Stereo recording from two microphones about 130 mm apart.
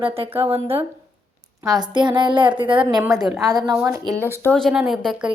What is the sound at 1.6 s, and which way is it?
A woman's voice, 30° right (ahead or behind).